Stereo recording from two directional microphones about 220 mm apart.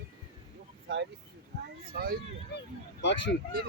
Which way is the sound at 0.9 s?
50° right (ahead or behind).